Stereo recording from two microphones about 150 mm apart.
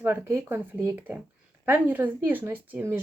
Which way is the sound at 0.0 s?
15° right (ahead or behind).